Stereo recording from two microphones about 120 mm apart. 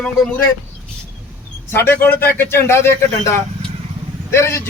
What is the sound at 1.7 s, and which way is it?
Speech, 20° left (ahead or behind).